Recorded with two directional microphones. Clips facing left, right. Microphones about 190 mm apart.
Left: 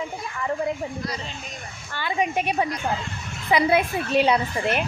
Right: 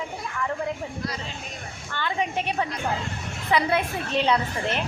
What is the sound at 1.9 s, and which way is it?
A woman's voice, 10° left (ahead or behind).